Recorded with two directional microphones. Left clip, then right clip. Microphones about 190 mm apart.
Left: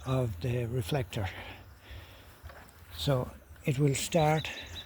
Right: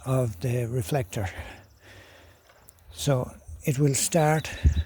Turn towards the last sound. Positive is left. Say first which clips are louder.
# right 4 dB
turn(degrees=-45)  # may be behind; listen again after turning